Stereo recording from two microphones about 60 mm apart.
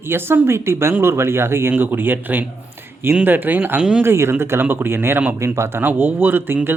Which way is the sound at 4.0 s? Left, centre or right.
Right.